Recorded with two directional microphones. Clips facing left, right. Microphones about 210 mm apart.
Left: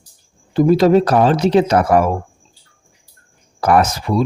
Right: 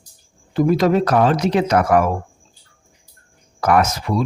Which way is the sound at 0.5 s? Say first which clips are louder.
Left 4 dB; 30° left (ahead or behind).